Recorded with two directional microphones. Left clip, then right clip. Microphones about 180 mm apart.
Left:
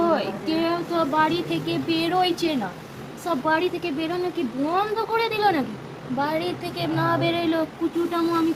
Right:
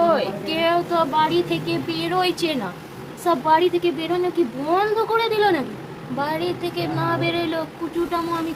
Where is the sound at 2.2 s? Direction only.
15° right (ahead or behind).